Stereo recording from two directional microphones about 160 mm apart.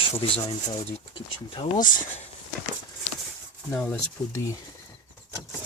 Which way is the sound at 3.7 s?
10° left (ahead or behind).